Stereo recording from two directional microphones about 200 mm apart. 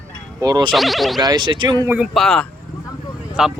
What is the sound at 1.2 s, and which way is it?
Speech, 20° right (ahead or behind).